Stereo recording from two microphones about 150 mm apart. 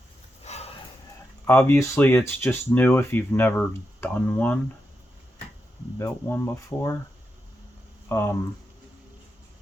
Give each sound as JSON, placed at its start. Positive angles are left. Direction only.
{"t": 0.4, "sound": "a sound", "side_deg": 45}
{"t": 1.5, "sound": "speech", "side_deg": 20}
{"t": 6.0, "sound": "speech", "side_deg": 15}
{"t": 8.1, "sound": "speech", "side_deg": 15}